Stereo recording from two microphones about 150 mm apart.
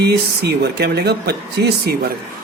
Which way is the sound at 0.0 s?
90° right.